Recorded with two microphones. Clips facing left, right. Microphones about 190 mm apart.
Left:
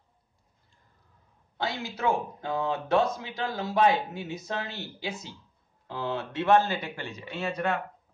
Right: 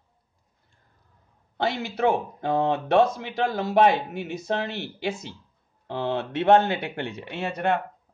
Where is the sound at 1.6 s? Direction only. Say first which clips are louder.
Right 7 dB; 65° right (ahead or behind).